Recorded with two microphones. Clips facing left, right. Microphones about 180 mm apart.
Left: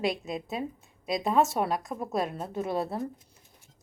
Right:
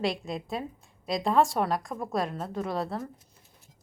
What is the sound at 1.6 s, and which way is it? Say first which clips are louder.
Speech: right 1 dB; centre (ahead or behind).